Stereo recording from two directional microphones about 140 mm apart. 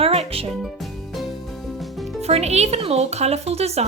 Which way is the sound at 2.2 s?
50° right (ahead or behind).